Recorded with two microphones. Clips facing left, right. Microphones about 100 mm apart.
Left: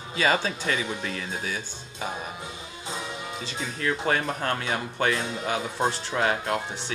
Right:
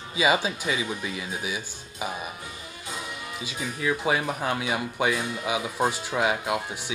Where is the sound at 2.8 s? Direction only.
25° left (ahead or behind).